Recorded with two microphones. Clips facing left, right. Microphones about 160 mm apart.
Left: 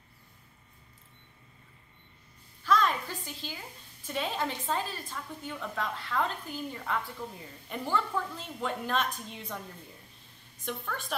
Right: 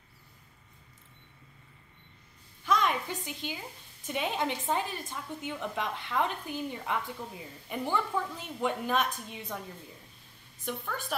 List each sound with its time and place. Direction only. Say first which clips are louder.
2.6 s a sound: left 1 dB; 15° right (ahead or behind)
4.0 s a woman's voice: right 1 dB; 15° right (ahead or behind)
10.6 s a woman's voice: right 1 dB; 5° right (ahead or behind)